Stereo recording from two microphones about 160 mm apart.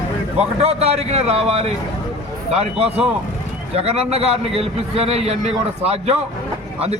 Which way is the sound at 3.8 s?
40° right (ahead or behind).